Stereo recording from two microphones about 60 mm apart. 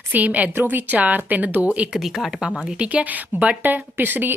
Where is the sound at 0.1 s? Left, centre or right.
Right.